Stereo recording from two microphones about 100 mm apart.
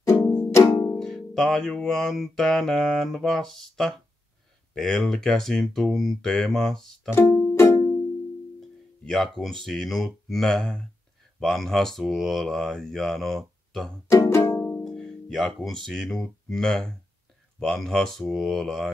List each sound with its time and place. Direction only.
0.0 s music: 30° left (ahead or behind)
0.9 s music: 5° left (ahead or behind)
7.1 s music: 25° left (ahead or behind)
8.5 s speech: 5° left (ahead or behind)
11.3 s music: 5° left (ahead or behind)
14.1 s music: 25° left (ahead or behind)
14.9 s speech: 5° left (ahead or behind)
17.6 s music: 5° left (ahead or behind)